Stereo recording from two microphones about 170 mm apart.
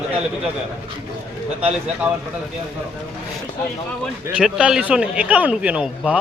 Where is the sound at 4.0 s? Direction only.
5° right (ahead or behind).